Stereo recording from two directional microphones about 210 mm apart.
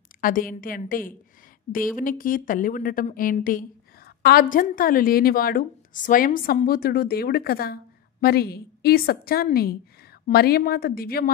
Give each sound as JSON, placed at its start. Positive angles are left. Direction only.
{"t": 0.2, "sound": "a woman's voice", "side_deg": 40}